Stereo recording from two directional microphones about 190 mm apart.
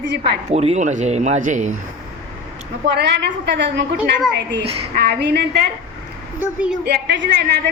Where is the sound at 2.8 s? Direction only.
65° right (ahead or behind).